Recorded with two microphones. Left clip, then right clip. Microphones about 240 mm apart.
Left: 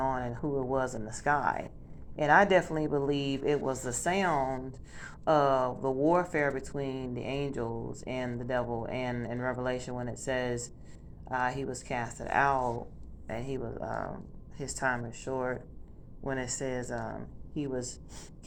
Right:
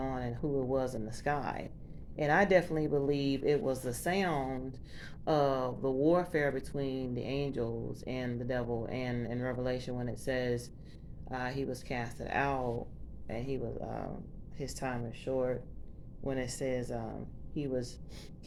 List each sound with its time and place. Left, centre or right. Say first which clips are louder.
0.4 s a woman's voice: left 1 dB; centre
0.9 s speech: left 1 dB; centre
1.2 s a woman's voice: left 7 dB; centre